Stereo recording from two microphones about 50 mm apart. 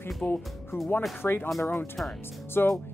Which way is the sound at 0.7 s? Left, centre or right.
Left.